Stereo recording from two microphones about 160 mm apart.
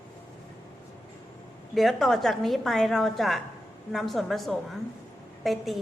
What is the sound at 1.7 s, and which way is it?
A woman's voice, centre (ahead or behind).